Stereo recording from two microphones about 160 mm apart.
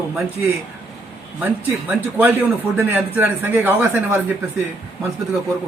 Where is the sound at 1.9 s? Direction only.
10° right (ahead or behind).